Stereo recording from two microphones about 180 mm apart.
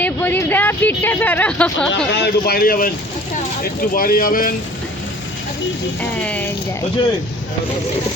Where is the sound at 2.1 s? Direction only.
65° left (ahead or behind).